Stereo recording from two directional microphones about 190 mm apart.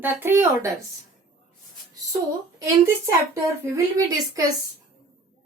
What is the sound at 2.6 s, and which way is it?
A woman's voice, 15° right (ahead or behind).